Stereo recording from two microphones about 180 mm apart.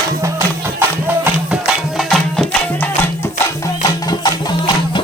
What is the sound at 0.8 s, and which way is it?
Music, 5° right (ahead or behind).